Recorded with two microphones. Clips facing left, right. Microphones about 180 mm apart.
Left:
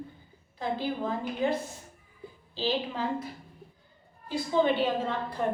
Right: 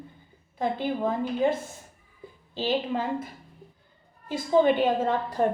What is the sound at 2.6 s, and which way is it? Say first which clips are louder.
Speech: right 3 dB; 50° right (ahead or behind).